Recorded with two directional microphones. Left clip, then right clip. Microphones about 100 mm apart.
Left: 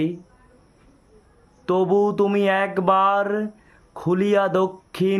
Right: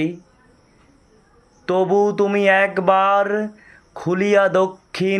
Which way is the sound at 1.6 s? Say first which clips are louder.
Right 2 dB; 45° left (ahead or behind).